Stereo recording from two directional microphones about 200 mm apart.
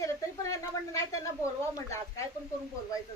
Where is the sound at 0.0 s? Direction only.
15° left (ahead or behind).